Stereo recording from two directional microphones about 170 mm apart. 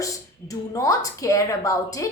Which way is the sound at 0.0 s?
20° left (ahead or behind).